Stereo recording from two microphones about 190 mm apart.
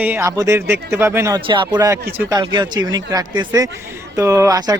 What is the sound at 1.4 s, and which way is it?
Speech, 25° right (ahead or behind).